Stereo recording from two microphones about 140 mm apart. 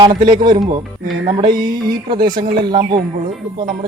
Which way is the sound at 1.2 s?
35° right (ahead or behind).